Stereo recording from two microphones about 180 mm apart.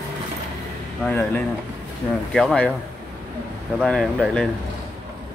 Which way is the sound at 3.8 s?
Centre (ahead or behind).